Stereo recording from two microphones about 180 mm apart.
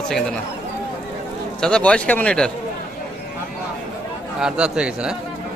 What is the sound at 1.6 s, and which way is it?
Speech, 5° left (ahead or behind).